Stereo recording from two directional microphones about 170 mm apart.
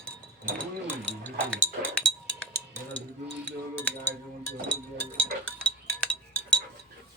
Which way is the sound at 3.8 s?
10° left (ahead or behind).